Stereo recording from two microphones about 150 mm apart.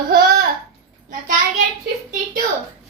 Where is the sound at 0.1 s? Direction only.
80° right.